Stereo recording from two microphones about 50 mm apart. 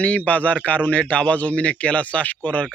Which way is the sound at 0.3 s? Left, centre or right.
Left.